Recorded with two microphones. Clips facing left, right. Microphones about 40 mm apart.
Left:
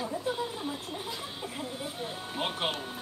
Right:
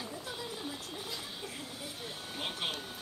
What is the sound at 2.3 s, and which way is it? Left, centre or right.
Music, left.